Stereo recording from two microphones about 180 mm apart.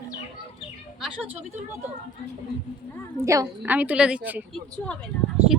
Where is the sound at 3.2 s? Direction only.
15° right (ahead or behind).